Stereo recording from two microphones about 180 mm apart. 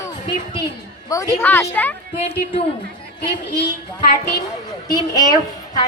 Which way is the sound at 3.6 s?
55° left (ahead or behind).